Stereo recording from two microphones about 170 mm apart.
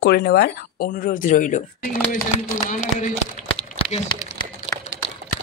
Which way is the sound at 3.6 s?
40° left (ahead or behind).